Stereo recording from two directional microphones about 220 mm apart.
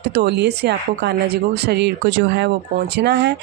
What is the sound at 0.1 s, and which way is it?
Speech, 50° right (ahead or behind).